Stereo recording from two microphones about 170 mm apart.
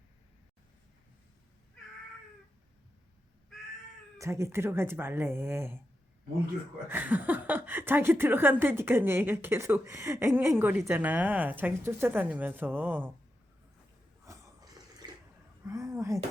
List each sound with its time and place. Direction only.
4.2 s speech: 15° right (ahead or behind)
6.8 s speech: 10° right (ahead or behind)
14.3 s water: 20° right (ahead or behind)
15.6 s a sound: 20° right (ahead or behind)